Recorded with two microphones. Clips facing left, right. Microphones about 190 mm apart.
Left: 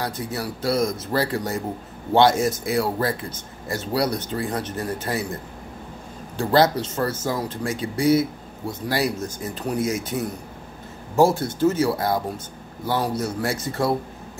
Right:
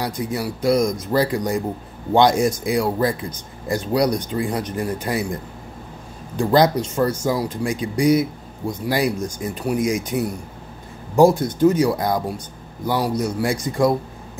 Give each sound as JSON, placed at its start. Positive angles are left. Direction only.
{"t": 0.0, "sound": "speech", "side_deg": -15}